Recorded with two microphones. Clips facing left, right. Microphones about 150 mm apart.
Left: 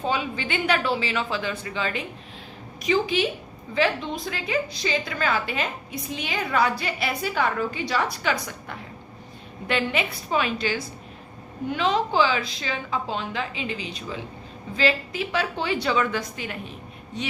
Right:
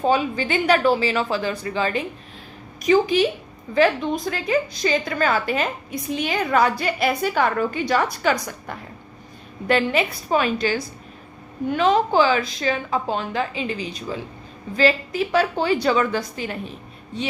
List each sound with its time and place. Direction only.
0.0 s a woman's voice: 40° right (ahead or behind)